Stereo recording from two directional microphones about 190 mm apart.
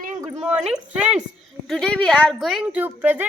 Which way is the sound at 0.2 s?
15° right (ahead or behind).